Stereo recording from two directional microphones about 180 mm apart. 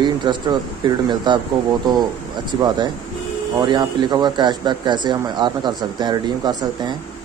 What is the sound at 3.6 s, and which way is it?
Speech, 25° right (ahead or behind).